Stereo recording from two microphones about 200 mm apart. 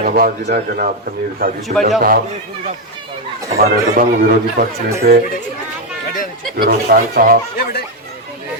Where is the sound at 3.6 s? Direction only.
45° right (ahead or behind).